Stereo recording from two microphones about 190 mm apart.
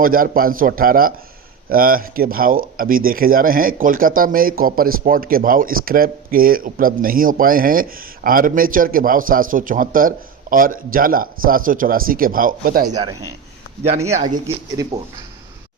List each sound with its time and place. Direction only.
0.0 s speech: 50° right (ahead or behind)
12.9 s a man's voice: 20° right (ahead or behind)
13.8 s speech: 35° right (ahead or behind)
14.8 s a man's voice: 20° right (ahead or behind)